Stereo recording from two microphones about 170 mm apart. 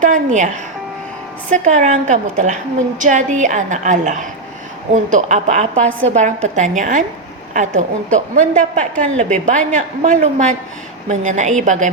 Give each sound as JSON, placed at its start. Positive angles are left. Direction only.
{"t": 0.0, "sound": "a woman's voice", "side_deg": -45}